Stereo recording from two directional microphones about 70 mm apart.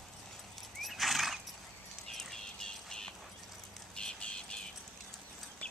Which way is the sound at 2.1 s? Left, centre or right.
Centre.